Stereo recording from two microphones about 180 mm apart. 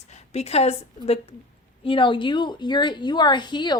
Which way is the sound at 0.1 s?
35° left (ahead or behind).